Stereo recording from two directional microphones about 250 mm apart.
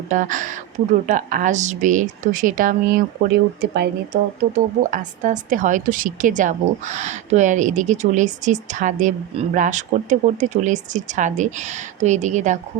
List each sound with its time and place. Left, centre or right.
0.1 s speech: right